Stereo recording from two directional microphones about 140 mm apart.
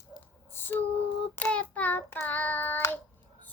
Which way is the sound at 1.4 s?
10° left (ahead or behind).